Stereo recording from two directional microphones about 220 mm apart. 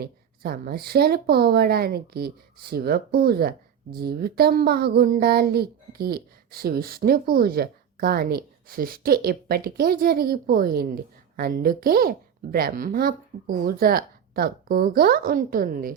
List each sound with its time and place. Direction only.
0.0 s speech: 45° right (ahead or behind)